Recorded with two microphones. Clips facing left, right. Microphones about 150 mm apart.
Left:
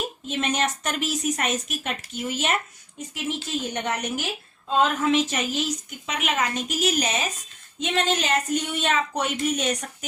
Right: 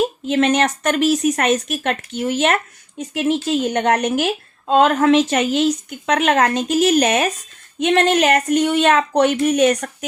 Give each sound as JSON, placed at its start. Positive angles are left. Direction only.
{"t": 0.3, "sound": "a woman's voice", "side_deg": -75}